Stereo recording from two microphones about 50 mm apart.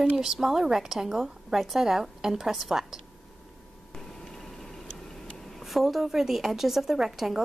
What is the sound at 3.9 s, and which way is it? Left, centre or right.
Vehicle, centre.